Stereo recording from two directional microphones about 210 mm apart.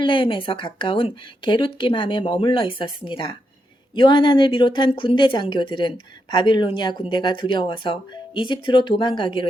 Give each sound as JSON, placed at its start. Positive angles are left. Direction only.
{"t": 0.0, "sound": "a woman's voice", "side_deg": 25}